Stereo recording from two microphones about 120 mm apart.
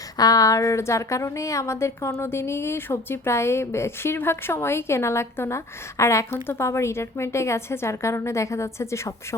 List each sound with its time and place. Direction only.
0.2 s a woman's voice: 30° left (ahead or behind)